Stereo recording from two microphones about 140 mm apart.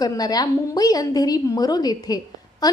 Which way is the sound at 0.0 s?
25° left (ahead or behind).